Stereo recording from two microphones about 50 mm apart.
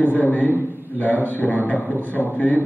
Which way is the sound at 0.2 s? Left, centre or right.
Left.